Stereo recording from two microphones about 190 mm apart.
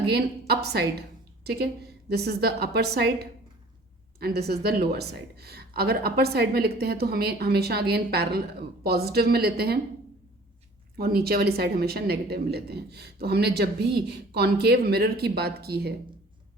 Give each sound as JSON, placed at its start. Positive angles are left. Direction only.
{"t": 0.1, "sound": "a woman's voice", "side_deg": -55}
{"t": 4.2, "sound": "a woman's voice", "side_deg": -55}
{"t": 10.9, "sound": "a woman's voice", "side_deg": -55}